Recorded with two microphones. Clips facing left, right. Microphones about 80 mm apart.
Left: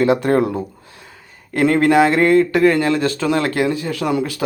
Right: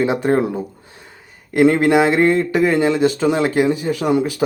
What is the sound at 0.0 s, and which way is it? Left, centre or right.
Speech, centre.